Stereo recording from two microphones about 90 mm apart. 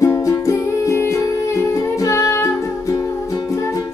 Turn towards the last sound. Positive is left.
turn(degrees=35)  # may be behind; listen again after turning